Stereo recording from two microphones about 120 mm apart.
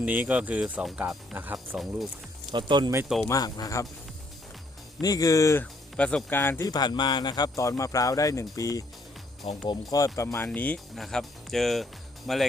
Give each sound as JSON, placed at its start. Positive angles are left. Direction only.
{"t": 0.0, "sound": "speech", "side_deg": -10}
{"t": 1.7, "sound": "speech", "side_deg": 0}
{"t": 2.5, "sound": "speech", "side_deg": -40}
{"t": 3.2, "sound": "speech", "side_deg": 30}
{"t": 4.9, "sound": "speech", "side_deg": 30}
{"t": 6.0, "sound": "speech", "side_deg": 5}
{"t": 6.3, "sound": "speech", "side_deg": 20}
{"t": 6.7, "sound": "speech", "side_deg": 35}
{"t": 9.4, "sound": "speech", "side_deg": 55}
{"t": 9.9, "sound": "speech", "side_deg": 25}
{"t": 10.9, "sound": "speech", "side_deg": 0}